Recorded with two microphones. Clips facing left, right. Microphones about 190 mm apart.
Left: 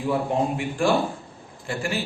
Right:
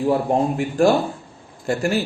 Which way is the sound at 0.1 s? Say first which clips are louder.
Right 3 dB; 40° right (ahead or behind).